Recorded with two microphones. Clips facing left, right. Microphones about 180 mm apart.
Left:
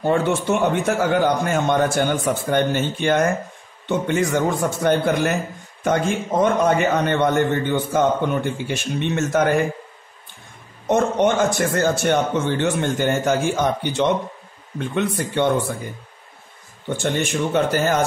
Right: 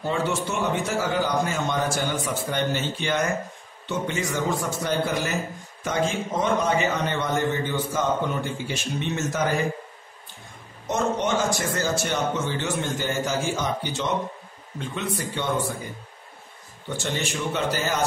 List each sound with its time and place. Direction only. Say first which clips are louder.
0.0 s a man's voice: left 6 dB; 55° left (ahead or behind)
10.9 s a man's voice: left 6 dB; 55° left (ahead or behind)
16.9 s a man's voice: left 6 dB; 55° left (ahead or behind)